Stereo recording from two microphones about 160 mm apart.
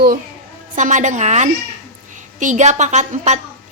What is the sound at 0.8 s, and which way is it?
A woman's voice, 50° right (ahead or behind).